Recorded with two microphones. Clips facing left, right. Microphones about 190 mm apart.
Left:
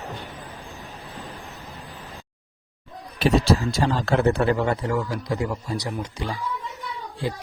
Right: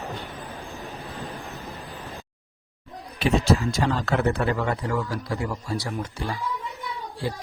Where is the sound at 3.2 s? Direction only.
40° left (ahead or behind).